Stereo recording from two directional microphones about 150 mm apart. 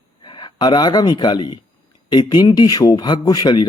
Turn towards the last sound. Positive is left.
turn(degrees=30)  # may be behind; listen again after turning